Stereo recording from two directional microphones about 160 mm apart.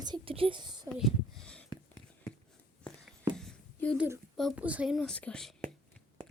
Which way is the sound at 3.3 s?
5° left (ahead or behind).